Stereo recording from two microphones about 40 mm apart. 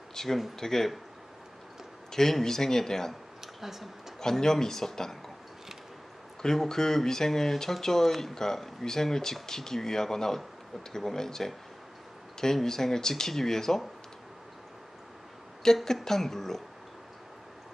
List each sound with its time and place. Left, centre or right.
0.1 s a sound: centre
0.5 s speech: centre
2.1 s speech: centre
3.4 s a sound: centre
4.2 s speech: centre
6.4 s speech: centre
12.6 s speech: centre
15.6 s speech: centre